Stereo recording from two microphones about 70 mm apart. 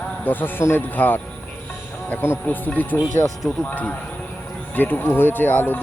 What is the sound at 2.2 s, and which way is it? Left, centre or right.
Speech, left.